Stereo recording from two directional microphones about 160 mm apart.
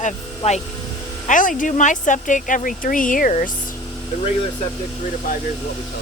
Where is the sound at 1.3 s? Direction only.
55° left (ahead or behind).